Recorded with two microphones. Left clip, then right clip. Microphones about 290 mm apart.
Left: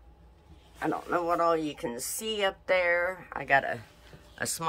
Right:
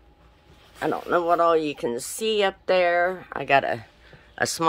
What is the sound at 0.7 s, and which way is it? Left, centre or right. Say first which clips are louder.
Speech: right 6 dB; right.